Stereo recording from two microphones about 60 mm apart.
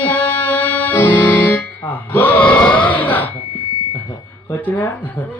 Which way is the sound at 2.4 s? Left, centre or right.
Centre.